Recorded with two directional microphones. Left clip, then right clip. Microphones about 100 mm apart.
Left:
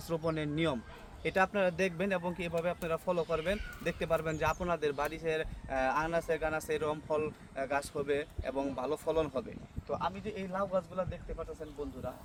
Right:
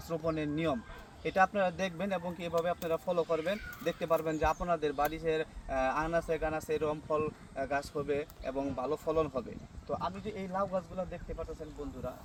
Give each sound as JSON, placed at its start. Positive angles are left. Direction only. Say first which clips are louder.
{"t": 0.1, "sound": "speech", "louder": "even", "side_deg": 25}